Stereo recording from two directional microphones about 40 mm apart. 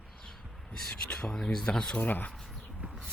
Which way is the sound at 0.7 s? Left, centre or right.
Centre.